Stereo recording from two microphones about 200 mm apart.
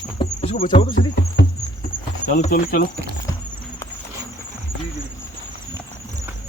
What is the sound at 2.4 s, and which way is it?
Speech, 45° left (ahead or behind).